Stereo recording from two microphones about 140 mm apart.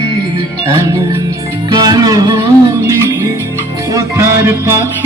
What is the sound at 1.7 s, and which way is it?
Music, 30° right (ahead or behind).